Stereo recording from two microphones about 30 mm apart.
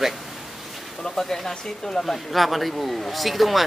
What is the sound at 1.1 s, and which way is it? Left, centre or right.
Speech, centre.